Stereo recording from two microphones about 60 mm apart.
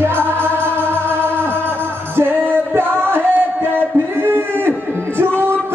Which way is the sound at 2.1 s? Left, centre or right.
Right.